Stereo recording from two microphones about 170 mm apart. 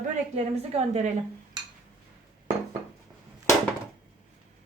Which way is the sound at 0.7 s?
40° right (ahead or behind).